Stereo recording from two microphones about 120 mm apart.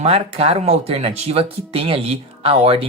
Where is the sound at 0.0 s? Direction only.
60° right (ahead or behind).